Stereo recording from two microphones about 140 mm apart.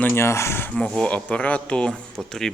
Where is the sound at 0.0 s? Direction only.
15° left (ahead or behind).